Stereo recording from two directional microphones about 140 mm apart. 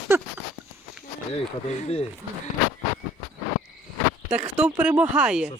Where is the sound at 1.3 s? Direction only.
50° left (ahead or behind).